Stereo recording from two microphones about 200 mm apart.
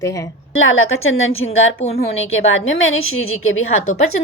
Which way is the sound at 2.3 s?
80° left.